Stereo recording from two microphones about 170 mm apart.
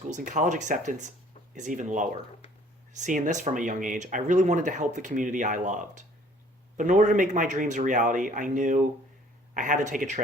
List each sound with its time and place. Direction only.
0.1 s speech: 50° right (ahead or behind)